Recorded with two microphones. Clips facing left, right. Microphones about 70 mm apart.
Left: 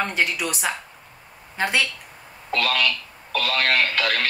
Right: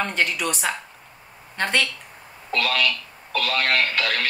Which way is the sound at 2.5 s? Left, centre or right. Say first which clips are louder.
Even; left.